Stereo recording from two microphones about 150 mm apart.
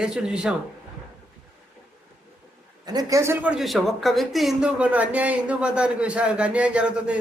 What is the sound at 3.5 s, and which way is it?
Speech, centre (ahead or behind).